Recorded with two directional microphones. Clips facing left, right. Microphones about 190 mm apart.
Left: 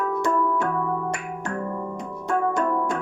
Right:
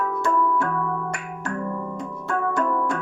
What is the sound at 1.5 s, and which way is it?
Music, 20° left (ahead or behind).